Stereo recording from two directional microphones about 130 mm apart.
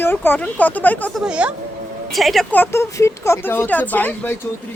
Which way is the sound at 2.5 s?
15° left (ahead or behind).